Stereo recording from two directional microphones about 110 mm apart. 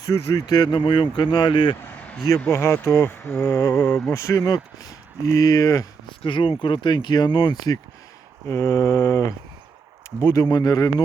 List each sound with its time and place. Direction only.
0.3 s speech: 40° left (ahead or behind)
2.0 s a sound: 10° left (ahead or behind)
2.5 s speech: 20° left (ahead or behind)
6.1 s speech: 50° left (ahead or behind)
8.4 s speech: 25° left (ahead or behind)